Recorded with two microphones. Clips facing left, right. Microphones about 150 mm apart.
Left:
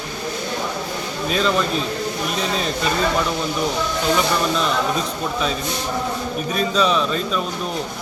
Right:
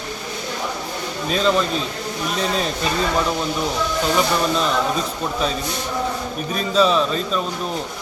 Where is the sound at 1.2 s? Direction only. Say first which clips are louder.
Right 1 dB; 35° right (ahead or behind).